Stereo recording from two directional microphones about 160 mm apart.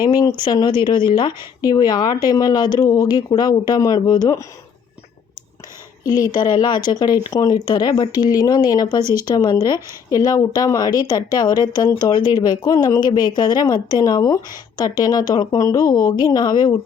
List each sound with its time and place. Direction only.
0.0 s speech: 25° left (ahead or behind)
6.1 s speech: 25° left (ahead or behind)